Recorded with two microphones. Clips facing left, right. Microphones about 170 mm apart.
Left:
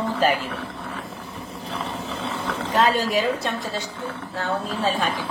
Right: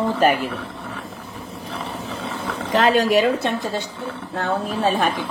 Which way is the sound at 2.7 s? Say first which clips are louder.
Right 4 dB; 70° right (ahead or behind).